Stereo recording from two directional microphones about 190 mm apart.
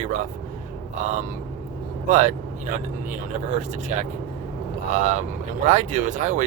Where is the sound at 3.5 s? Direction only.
35° right (ahead or behind).